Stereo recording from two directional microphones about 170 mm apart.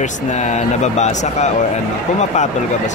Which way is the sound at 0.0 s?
45° left (ahead or behind).